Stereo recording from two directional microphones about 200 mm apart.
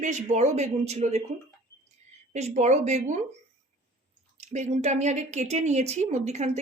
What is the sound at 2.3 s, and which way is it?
Speech, 35° right (ahead or behind).